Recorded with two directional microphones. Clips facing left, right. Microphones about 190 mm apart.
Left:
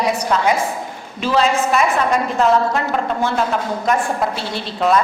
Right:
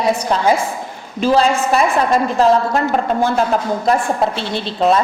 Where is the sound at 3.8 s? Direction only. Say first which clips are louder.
Right 1 dB; 30° right (ahead or behind).